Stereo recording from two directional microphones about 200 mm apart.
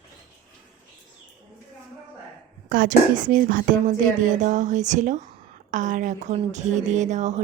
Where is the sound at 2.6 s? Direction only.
45° right (ahead or behind).